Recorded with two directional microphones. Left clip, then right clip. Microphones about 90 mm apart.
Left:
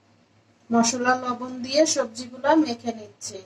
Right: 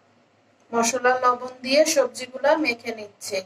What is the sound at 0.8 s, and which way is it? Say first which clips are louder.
A woman's voice: right 4 dB; 30° right (ahead or behind).